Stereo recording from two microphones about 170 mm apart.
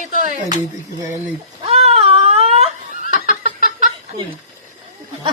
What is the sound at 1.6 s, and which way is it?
Cat, 35° right (ahead or behind).